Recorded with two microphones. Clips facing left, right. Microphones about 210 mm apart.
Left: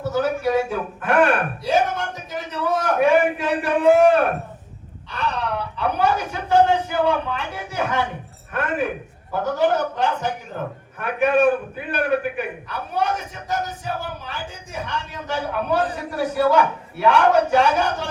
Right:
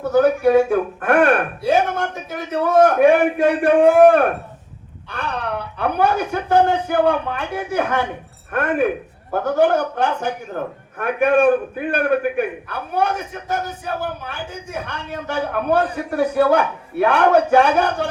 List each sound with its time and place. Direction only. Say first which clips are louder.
0.0 s a man's voice: right 7 dB; 55° right (ahead or behind)